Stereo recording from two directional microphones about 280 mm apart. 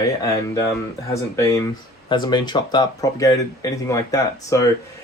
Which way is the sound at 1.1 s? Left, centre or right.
Centre.